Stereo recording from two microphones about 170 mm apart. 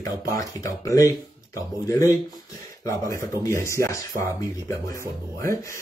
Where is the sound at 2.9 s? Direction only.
15° left (ahead or behind).